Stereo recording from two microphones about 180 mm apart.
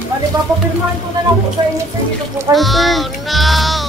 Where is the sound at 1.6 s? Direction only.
25° right (ahead or behind).